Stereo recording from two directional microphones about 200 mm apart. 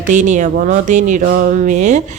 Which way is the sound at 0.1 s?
35° right (ahead or behind).